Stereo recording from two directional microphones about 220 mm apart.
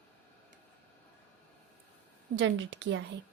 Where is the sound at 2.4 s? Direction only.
55° right (ahead or behind).